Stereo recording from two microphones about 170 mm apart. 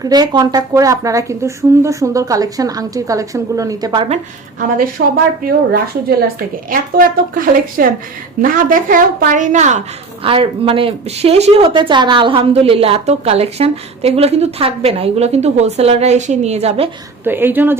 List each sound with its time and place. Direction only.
0.0 s speech: 25° right (ahead or behind)
5.0 s a woman's voice: 60° right (ahead or behind); by 9.8 s 45° right (ahead or behind)
10.2 s speech: 30° right (ahead or behind)
17.2 s speech: 10° right (ahead or behind)